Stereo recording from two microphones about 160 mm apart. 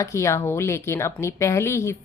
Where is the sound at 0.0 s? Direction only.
20° left (ahead or behind).